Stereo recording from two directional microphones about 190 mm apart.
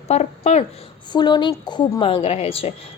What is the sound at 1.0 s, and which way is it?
A woman's voice, 25° left (ahead or behind).